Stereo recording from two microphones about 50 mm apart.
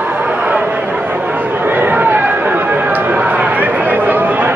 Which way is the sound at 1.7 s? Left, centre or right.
Right.